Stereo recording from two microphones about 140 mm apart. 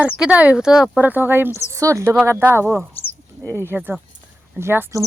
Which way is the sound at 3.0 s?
10° left (ahead or behind).